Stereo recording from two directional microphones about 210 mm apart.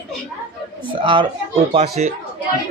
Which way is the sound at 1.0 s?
25° right (ahead or behind).